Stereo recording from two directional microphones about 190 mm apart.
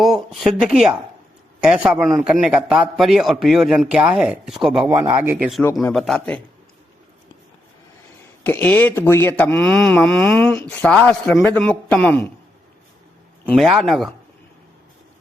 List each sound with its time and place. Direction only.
0.0 s a man's voice: centre (ahead or behind)
4.9 s a man's voice: 15° right (ahead or behind); by 6.4 s 5° left (ahead or behind)
8.4 s speech: 10° left (ahead or behind)
13.5 s a man's voice: centre (ahead or behind)